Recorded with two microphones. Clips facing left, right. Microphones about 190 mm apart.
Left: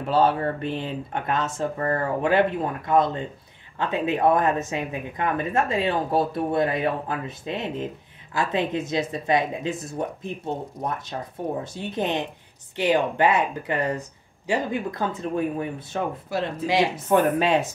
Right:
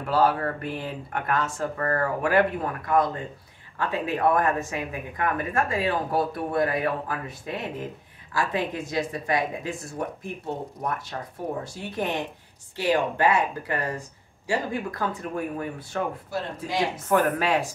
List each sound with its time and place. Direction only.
0.0 s speech: 25° left (ahead or behind)
16.6 s speech: 80° left
17.1 s speech: 20° left (ahead or behind)